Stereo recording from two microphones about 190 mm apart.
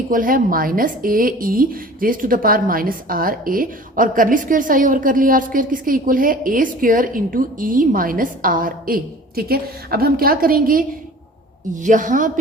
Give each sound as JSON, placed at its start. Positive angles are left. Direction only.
{"t": 0.1, "sound": "a woman's voice", "side_deg": -45}